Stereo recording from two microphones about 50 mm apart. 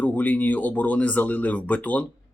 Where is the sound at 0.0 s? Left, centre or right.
Left.